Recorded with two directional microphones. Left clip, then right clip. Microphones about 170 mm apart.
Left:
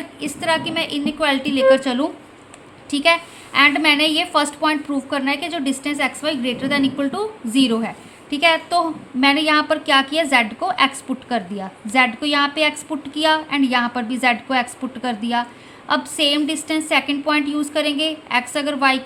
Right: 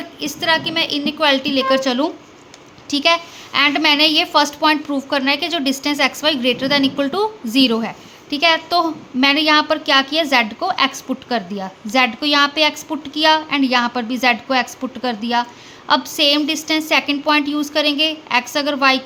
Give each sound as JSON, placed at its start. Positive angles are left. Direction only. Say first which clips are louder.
{"t": 0.2, "sound": "a woman's voice", "louder": "right 3 dB", "side_deg": -15}